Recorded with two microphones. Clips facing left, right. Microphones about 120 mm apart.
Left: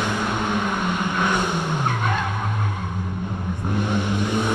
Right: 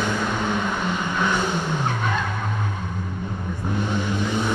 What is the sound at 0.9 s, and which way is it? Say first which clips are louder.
Vehicle: left 1 dB; 55° left (ahead or behind).